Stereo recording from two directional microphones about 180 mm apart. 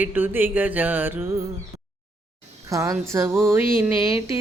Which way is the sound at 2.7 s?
15° right (ahead or behind).